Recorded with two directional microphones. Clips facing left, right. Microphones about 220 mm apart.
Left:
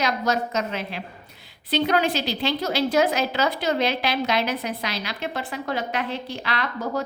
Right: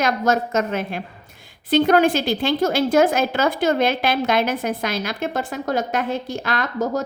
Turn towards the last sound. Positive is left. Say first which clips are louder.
# right 4 dB
turn(degrees=-45)  # may be behind; listen again after turning